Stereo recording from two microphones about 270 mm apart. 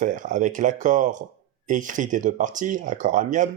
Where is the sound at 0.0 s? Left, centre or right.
Right.